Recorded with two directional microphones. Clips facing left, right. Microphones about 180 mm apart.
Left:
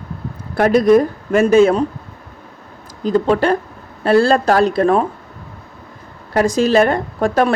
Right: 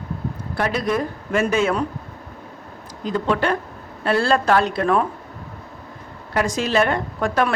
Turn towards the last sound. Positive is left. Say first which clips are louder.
# left 5 dB
turn(degrees=35)  # may be behind; listen again after turning